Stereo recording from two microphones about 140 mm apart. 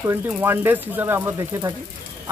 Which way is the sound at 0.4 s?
15° right (ahead or behind).